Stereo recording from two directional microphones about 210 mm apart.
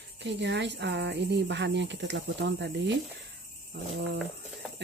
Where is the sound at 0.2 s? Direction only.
55° right (ahead or behind).